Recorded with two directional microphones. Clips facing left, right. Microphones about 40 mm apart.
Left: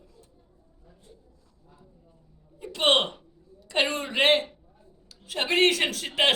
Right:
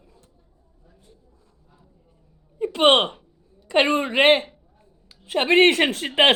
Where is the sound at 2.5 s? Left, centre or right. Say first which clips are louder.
Right 6 dB; right.